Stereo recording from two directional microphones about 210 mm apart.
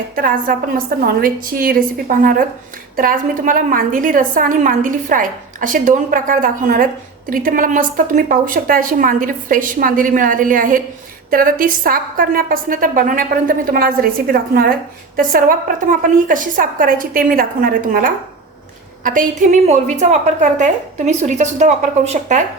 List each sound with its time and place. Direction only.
0.2 s a woman's voice: 45° right (ahead or behind)